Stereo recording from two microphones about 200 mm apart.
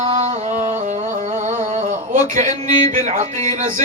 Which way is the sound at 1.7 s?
40° right (ahead or behind).